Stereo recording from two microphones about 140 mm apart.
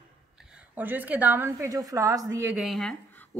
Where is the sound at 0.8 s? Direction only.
15° right (ahead or behind).